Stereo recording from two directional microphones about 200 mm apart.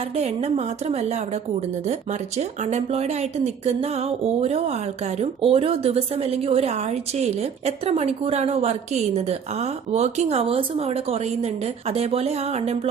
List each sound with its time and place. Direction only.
0.1 s speech: 30° right (ahead or behind)